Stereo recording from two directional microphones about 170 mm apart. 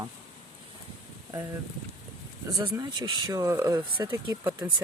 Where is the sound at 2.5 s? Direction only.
20° right (ahead or behind).